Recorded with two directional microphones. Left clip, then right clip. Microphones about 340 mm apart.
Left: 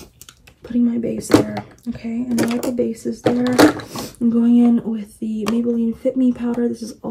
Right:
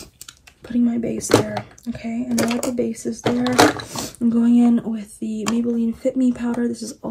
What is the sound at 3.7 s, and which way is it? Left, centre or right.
Speech, right.